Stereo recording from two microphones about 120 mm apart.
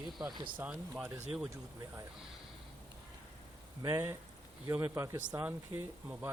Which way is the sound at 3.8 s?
30° right (ahead or behind).